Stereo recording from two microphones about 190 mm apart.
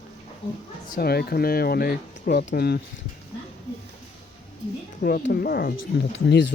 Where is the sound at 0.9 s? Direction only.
55° left (ahead or behind).